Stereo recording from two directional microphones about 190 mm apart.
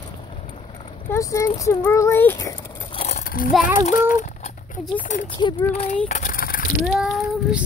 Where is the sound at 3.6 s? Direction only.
45° left (ahead or behind).